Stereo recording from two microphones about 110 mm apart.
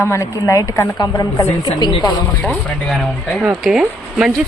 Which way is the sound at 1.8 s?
40° left (ahead or behind).